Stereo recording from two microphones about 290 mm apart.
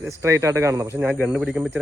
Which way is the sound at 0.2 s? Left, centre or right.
Centre.